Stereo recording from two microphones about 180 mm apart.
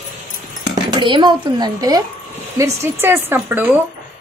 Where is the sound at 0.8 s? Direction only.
25° right (ahead or behind).